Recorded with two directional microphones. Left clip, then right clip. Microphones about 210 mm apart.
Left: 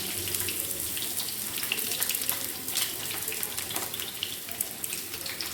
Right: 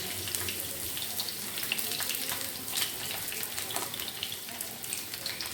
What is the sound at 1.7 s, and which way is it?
Frying, centre (ahead or behind).